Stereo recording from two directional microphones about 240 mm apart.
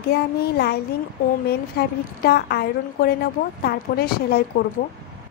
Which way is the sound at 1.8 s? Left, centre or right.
Left.